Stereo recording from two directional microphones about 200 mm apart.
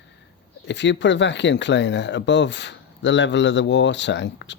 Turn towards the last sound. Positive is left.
turn(degrees=60)  # may be behind; listen again after turning